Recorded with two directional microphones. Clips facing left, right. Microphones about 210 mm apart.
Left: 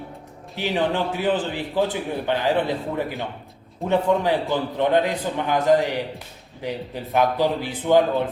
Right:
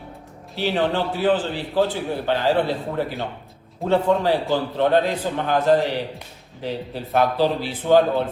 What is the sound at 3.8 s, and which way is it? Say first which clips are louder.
A man's voice: right 1 dB; 20° left (ahead or behind).